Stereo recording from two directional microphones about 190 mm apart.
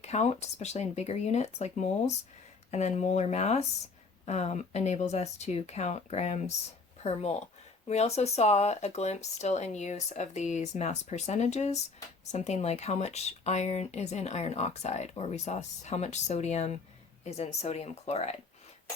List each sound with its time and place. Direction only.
0.0 s speech: 35° left (ahead or behind)